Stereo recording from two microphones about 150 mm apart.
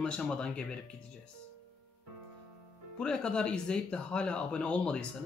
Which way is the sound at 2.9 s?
5° left (ahead or behind).